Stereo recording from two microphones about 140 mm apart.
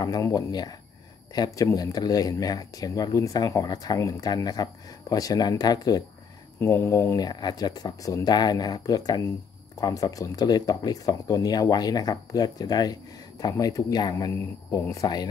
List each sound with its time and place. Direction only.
0.0 s speech: 25° left (ahead or behind)
7.2 s speech: 30° left (ahead or behind)